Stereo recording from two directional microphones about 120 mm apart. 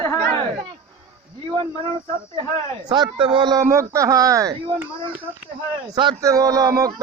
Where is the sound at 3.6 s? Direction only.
25° right (ahead or behind).